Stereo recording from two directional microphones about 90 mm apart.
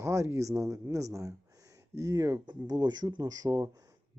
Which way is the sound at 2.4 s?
50° right (ahead or behind).